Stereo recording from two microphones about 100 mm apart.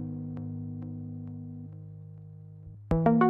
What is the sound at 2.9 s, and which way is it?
Music, centre (ahead or behind).